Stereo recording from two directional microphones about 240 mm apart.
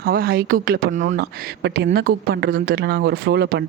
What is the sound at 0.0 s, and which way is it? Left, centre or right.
A woman's voice, right.